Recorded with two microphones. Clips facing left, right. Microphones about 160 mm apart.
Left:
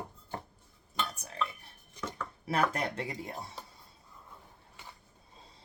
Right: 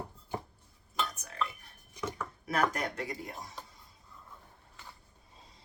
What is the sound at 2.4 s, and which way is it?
Speech, 30° left (ahead or behind).